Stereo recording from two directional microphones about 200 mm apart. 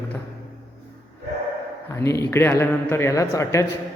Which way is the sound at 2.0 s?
15° left (ahead or behind).